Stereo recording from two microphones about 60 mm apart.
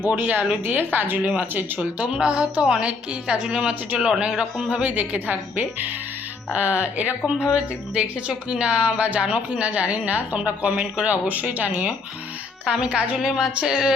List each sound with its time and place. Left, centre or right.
0.1 s speech: right
1.8 s a woman's voice: centre
4.8 s speech: right
13.1 s a woman's voice: centre